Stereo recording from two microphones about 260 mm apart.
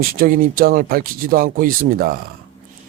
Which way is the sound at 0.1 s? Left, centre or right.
Right.